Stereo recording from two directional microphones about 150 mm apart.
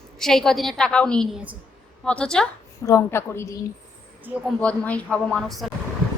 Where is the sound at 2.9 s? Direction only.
20° left (ahead or behind).